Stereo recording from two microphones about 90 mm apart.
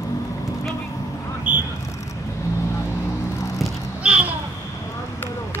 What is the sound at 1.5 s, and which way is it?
Vehicle, 20° right (ahead or behind).